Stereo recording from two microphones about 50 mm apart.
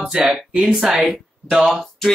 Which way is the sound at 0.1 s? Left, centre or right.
Centre.